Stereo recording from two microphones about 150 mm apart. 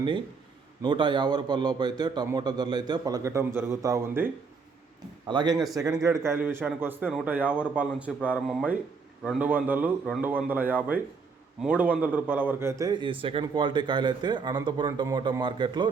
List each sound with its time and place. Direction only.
0.8 s a man's voice: 30° right (ahead or behind)
5.3 s a man's voice: 30° right (ahead or behind)